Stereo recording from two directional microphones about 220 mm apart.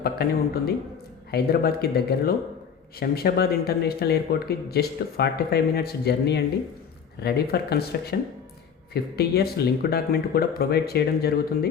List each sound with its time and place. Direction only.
0.0 s speech: 45° left (ahead or behind)
8.9 s speech: 45° left (ahead or behind)